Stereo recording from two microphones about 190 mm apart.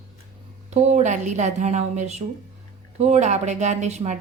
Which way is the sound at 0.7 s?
35° right (ahead or behind).